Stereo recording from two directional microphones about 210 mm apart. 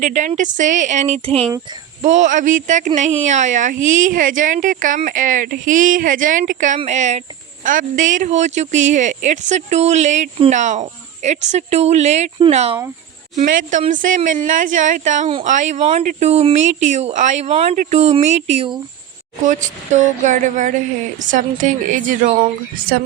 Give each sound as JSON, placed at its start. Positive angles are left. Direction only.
{"t": 0.0, "sound": "speech", "side_deg": -35}